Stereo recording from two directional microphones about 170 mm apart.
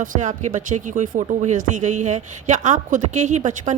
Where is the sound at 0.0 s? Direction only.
50° right (ahead or behind).